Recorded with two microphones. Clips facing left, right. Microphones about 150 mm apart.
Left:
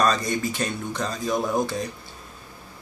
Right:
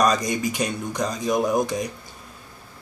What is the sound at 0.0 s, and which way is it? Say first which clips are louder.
Speech: right 2 dB; 15° right (ahead or behind).